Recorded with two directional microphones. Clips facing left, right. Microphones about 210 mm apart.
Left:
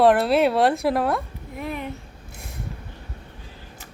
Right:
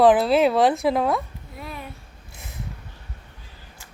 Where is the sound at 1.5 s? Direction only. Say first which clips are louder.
Left 6 dB; 20° left (ahead or behind).